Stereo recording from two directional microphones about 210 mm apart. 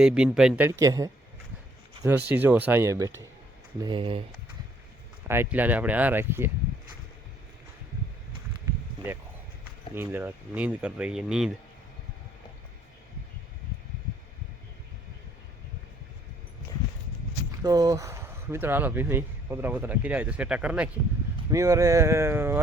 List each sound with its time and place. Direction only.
0.0 s speech: 5° right (ahead or behind); by 4.2 s 25° right (ahead or behind)
5.3 s speech: 10° right (ahead or behind)
9.9 s speech: 10° right (ahead or behind)
17.6 s speech: 15° right (ahead or behind)